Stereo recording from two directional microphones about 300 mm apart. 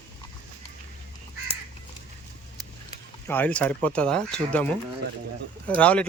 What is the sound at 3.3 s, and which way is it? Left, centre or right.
Speech, centre.